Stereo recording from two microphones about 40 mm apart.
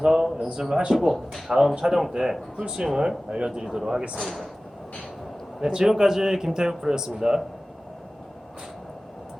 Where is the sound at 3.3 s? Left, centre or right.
Right.